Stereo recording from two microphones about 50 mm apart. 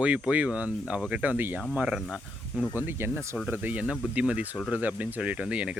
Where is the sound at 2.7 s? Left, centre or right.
Right.